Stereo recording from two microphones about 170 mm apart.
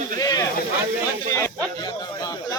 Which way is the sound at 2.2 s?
20° left (ahead or behind).